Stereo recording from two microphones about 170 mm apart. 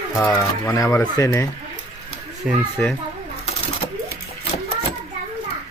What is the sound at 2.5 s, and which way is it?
Speech, 5° right (ahead or behind).